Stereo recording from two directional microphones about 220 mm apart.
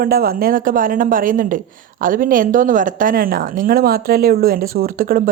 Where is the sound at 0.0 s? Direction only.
40° right (ahead or behind).